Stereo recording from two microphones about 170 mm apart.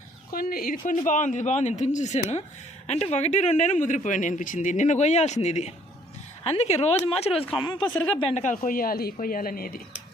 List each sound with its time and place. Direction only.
0.3 s speech: 60° left (ahead or behind); by 7.9 s 25° left (ahead or behind)
8.2 s speech: 40° left (ahead or behind); by 9.8 s 60° left (ahead or behind)